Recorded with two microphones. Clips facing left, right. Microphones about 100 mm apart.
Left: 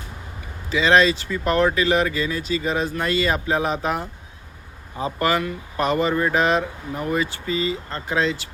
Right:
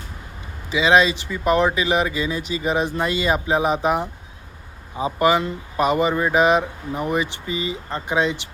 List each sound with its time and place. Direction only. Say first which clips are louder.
0.7 s speech: even; 10° right (ahead or behind)